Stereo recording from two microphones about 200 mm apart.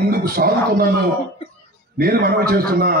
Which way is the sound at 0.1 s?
50° right (ahead or behind).